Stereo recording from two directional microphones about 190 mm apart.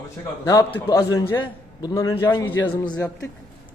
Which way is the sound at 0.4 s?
20° left (ahead or behind).